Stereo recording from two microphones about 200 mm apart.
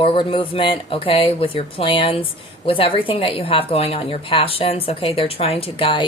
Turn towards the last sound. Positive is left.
turn(degrees=25)  # may be behind; listen again after turning